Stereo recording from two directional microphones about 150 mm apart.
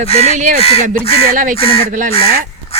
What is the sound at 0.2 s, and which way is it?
Speech, 55° right (ahead or behind).